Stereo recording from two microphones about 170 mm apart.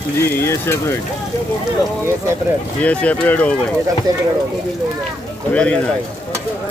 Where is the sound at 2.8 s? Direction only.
10° left (ahead or behind).